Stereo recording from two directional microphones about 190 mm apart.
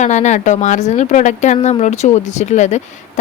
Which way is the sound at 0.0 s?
40° left (ahead or behind).